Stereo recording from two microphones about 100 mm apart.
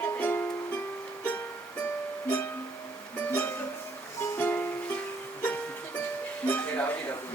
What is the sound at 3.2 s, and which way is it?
Music, 20° left (ahead or behind).